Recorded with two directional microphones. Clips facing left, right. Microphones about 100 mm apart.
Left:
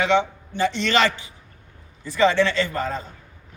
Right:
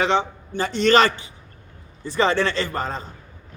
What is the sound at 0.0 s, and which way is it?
A man's voice, 35° right (ahead or behind).